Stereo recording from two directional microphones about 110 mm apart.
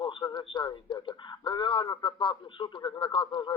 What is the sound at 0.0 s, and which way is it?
Speech, 45° left (ahead or behind).